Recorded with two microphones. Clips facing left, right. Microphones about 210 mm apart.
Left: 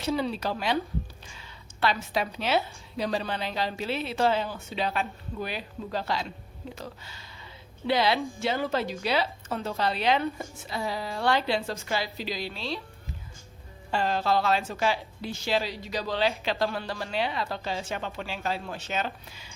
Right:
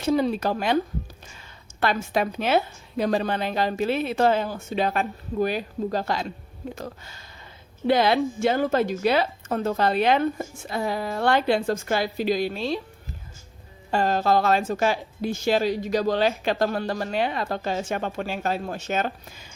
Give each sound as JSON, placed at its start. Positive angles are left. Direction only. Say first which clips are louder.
{"t": 0.0, "sound": "a woman's voice", "louder": "right 6 dB", "side_deg": -50}
{"t": 13.9, "sound": "a woman's voice", "louder": "right 4 dB", "side_deg": -45}